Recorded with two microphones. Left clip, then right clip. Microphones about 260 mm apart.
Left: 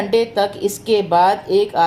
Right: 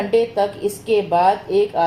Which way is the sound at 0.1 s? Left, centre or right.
Left.